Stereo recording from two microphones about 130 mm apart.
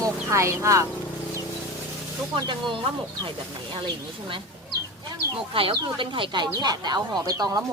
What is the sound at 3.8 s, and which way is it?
Speech, 40° right (ahead or behind).